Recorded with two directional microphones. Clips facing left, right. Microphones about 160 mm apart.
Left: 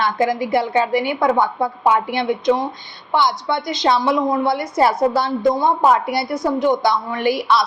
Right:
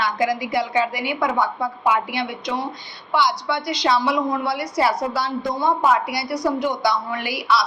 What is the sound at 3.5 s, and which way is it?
A woman's voice, 50° left (ahead or behind).